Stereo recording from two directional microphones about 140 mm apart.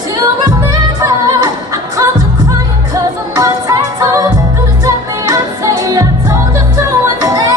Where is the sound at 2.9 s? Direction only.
25° right (ahead or behind).